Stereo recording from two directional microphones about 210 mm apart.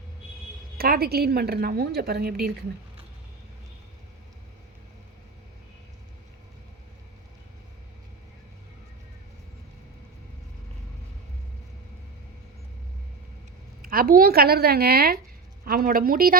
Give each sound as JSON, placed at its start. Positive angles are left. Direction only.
{"t": 0.8, "sound": "a woman's voice", "side_deg": -45}
{"t": 13.8, "sound": "a woman's voice", "side_deg": -45}